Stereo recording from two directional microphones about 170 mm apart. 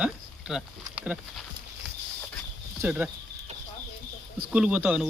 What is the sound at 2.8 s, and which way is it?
Speech, 10° right (ahead or behind).